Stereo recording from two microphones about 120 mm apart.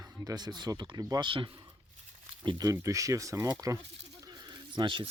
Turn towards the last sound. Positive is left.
turn(degrees=-40)  # may be behind; listen again after turning